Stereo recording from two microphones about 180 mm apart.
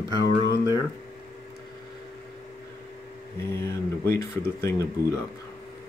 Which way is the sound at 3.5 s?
15° left (ahead or behind).